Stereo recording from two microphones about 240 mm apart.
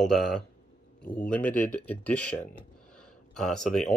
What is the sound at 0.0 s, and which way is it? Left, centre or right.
Speech, centre.